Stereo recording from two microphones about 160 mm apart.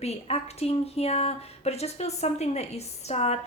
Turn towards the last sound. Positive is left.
turn(degrees=40)  # may be behind; listen again after turning